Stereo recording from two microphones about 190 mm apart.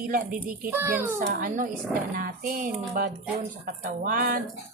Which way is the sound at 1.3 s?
45° right (ahead or behind).